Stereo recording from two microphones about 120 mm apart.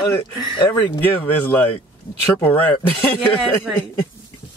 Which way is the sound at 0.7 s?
15° left (ahead or behind).